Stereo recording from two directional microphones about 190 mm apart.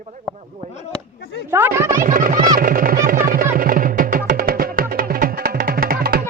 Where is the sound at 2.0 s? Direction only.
45° right (ahead or behind).